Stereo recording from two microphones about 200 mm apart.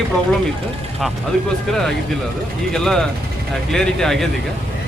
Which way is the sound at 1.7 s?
Centre (ahead or behind).